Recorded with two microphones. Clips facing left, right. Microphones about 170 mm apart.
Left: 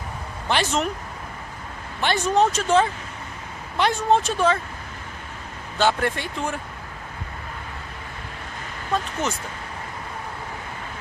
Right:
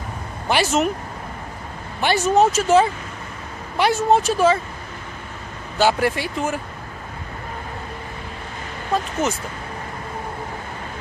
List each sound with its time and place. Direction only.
0.5 s speech: 10° right (ahead or behind)
2.0 s speech: 10° right (ahead or behind)
5.8 s speech: 5° right (ahead or behind)